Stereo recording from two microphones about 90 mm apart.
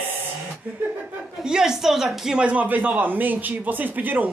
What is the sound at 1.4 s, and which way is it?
Speech, 5° right (ahead or behind).